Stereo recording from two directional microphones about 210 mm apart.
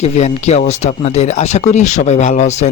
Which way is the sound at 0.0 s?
30° left (ahead or behind).